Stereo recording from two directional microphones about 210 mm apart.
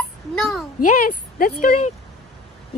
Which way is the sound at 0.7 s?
40° left (ahead or behind).